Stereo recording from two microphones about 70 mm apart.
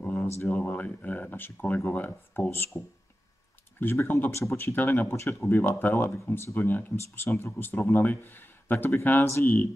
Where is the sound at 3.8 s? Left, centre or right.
Left.